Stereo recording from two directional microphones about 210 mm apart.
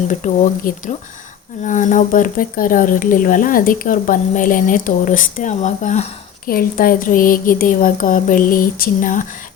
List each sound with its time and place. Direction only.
0.1 s speech: 35° left (ahead or behind)